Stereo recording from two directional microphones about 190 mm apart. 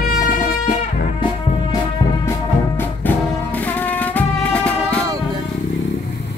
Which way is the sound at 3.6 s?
10° left (ahead or behind).